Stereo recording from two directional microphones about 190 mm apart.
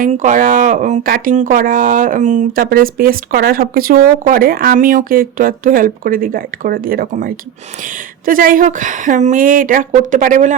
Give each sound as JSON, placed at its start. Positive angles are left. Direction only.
{"t": 0.0, "sound": "speech", "side_deg": -40}